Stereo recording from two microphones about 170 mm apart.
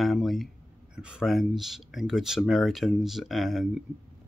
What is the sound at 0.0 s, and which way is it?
Speech, centre (ahead or behind).